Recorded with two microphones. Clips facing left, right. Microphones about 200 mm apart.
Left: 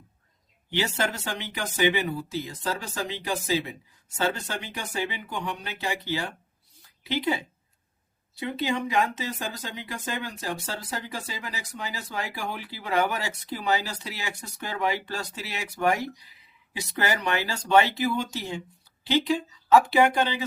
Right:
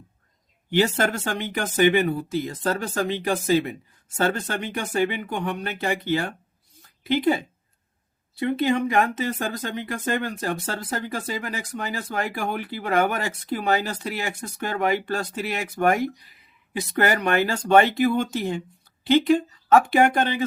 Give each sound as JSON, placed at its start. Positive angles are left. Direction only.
{"t": 0.7, "sound": "speech", "side_deg": -50}